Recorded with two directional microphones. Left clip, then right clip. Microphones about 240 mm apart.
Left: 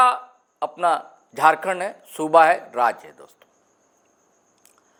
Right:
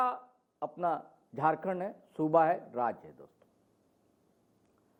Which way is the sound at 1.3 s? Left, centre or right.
Centre.